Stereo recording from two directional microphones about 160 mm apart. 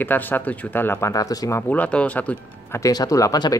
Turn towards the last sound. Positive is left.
turn(degrees=20)  # may be behind; listen again after turning